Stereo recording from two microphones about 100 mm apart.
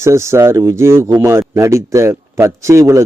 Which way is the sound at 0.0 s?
30° right (ahead or behind).